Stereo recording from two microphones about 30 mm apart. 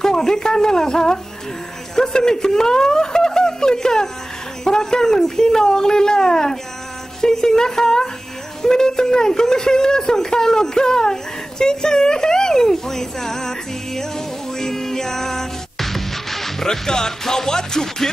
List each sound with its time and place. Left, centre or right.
0.0 s speech: centre
12.7 s music: centre
16.6 s speech: centre